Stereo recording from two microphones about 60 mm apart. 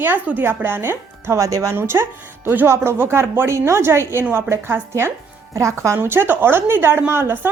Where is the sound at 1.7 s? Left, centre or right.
Right.